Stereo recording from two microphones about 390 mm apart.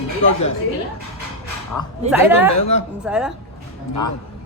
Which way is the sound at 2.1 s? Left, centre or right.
Centre.